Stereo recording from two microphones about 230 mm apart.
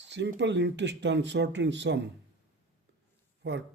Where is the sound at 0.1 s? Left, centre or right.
Right.